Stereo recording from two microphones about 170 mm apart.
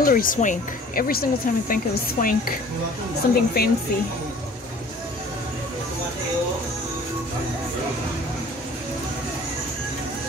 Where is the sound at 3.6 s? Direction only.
65° left (ahead or behind).